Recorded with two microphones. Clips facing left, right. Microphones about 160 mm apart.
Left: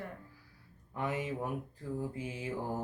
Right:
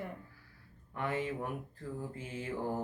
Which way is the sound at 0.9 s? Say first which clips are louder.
Even; 15° left (ahead or behind).